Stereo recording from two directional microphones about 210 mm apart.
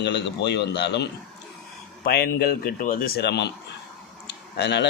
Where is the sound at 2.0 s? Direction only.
45° left (ahead or behind).